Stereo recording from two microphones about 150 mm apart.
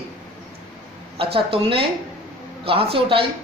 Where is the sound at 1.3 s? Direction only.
35° right (ahead or behind).